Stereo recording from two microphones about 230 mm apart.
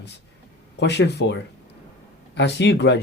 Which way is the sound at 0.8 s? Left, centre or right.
Left.